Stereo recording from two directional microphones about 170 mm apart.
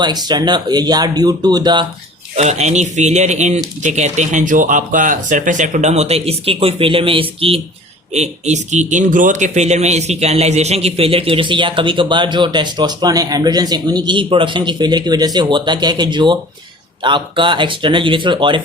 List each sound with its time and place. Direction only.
0.0 s speech: 25° right (ahead or behind)
2.3 s speech: 40° right (ahead or behind)